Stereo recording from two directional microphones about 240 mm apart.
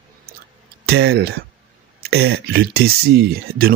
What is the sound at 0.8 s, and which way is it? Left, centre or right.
Speech, right.